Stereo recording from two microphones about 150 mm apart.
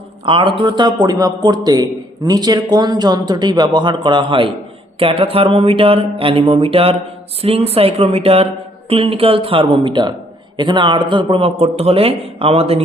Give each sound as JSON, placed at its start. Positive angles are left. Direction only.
{"t": 0.3, "sound": "a man's voice", "side_deg": -35}